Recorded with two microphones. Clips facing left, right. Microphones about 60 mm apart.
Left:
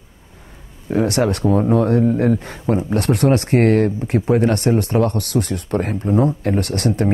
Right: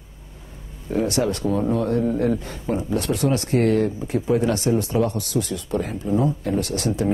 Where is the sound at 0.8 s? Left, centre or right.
Left.